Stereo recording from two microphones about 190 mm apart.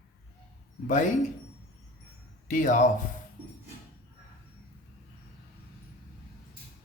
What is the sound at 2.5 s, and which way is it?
Speech, 40° left (ahead or behind).